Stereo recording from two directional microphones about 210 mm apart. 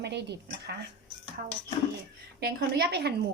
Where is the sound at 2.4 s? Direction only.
50° right (ahead or behind).